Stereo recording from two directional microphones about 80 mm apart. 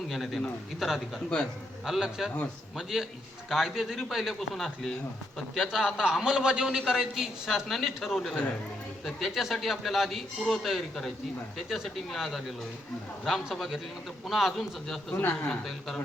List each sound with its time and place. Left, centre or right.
0.1 s a man's voice: centre